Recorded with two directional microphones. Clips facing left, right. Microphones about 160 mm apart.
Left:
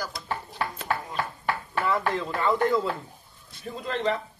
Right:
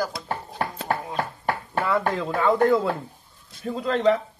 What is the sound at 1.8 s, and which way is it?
Speech, 60° right (ahead or behind).